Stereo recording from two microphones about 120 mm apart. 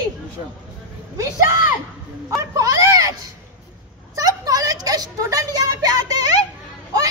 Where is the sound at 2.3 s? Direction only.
30° right (ahead or behind).